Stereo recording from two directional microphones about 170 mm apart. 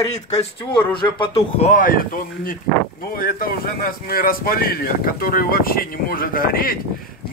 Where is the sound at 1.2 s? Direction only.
40° left (ahead or behind).